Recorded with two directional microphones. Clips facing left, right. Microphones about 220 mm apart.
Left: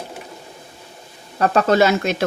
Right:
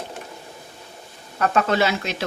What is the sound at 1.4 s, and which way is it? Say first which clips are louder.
Speech: left 5 dB; 40° left (ahead or behind).